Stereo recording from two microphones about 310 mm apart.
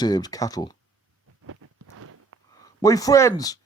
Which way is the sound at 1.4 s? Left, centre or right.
Right.